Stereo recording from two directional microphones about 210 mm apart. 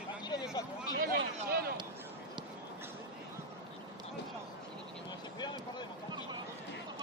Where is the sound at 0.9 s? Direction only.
45° right (ahead or behind).